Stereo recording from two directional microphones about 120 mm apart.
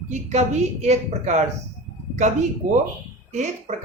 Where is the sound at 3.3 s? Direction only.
85° right.